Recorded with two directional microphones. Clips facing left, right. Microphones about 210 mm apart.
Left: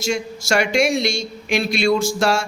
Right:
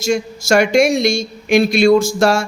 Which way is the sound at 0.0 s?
45° right (ahead or behind).